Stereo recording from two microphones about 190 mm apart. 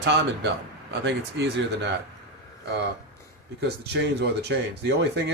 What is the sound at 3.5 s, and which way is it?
Speech, 60° right (ahead or behind).